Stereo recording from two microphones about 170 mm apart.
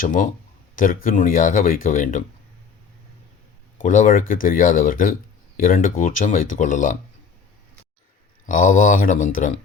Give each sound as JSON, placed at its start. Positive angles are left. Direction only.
{"t": 0.0, "sound": "speech", "side_deg": 50}
{"t": 3.8, "sound": "speech", "side_deg": 50}
{"t": 8.4, "sound": "speech", "side_deg": 50}